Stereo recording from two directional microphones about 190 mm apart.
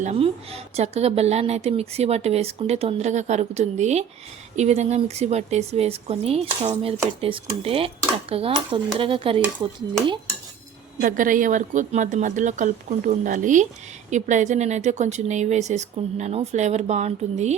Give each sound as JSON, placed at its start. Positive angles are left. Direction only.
{"t": 0.0, "sound": "a woman's voice", "side_deg": -35}
{"t": 11.0, "sound": "a woman's voice", "side_deg": -45}